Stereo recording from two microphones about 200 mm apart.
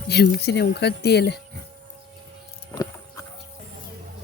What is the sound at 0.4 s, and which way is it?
Speech, 55° left (ahead or behind).